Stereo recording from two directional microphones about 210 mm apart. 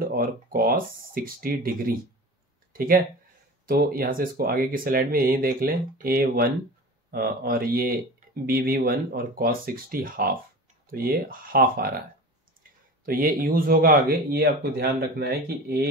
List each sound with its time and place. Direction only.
0.0 s speech: 45° right (ahead or behind)
3.6 s speech: 45° right (ahead or behind)
13.0 s speech: 45° right (ahead or behind)